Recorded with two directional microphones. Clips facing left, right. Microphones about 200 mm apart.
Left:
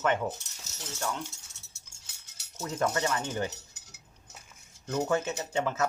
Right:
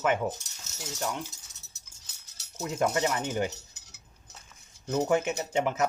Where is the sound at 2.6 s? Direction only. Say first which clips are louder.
Right 2 dB; 20° right (ahead or behind).